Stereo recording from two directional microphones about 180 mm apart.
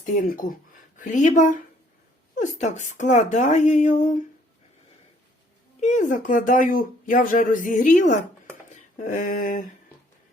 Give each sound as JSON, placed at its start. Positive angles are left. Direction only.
{"t": 0.0, "sound": "speech", "side_deg": 45}
{"t": 5.8, "sound": "speech", "side_deg": 40}
{"t": 8.7, "sound": "a sound", "side_deg": 45}